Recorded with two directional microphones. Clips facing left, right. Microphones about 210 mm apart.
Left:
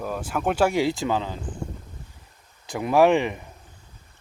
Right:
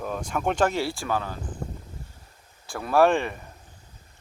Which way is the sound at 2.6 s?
20° left (ahead or behind).